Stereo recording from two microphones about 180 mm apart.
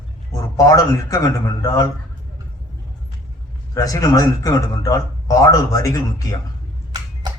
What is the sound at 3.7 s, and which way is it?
A man's voice, 20° left (ahead or behind).